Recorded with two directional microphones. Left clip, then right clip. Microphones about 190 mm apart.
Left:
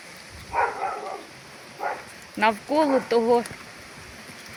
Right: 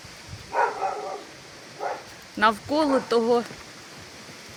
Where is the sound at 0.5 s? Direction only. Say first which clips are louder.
Right 1 dB; 5° left (ahead or behind).